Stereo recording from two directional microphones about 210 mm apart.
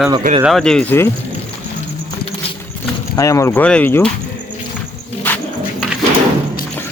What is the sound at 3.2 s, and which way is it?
Speech, 15° left (ahead or behind).